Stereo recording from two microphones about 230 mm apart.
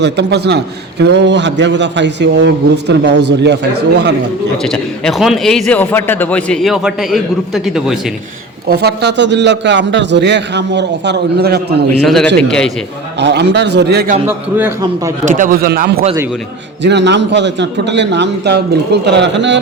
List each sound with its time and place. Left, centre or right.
0.0 s a man's voice: right
4.6 s a man's voice: centre
8.6 s a man's voice: right
12.0 s a man's voice: centre
13.1 s a man's voice: right
14.3 s a man's voice: centre
15.2 s a man's voice: right